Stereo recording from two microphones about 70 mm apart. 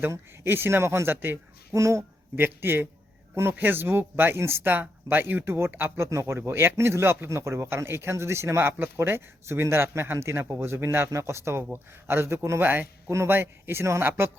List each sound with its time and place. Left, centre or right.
0.1 s a man's voice: right
1.7 s speech: right
2.4 s a man's voice: right